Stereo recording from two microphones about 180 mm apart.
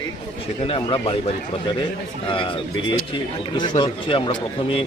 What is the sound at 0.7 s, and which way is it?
Speech, 30° left (ahead or behind).